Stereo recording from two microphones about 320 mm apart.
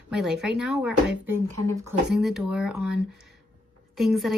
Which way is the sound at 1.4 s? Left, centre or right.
Right.